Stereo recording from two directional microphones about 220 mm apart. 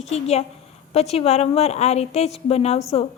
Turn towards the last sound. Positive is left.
turn(degrees=30)  # may be behind; listen again after turning